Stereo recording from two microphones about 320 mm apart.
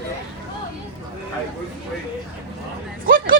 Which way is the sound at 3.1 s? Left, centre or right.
Right.